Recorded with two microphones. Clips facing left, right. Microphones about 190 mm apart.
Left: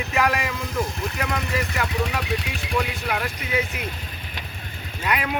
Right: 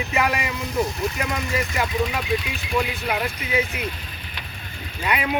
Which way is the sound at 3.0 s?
5° right (ahead or behind).